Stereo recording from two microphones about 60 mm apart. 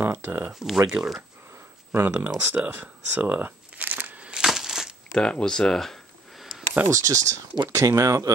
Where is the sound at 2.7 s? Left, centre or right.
Right.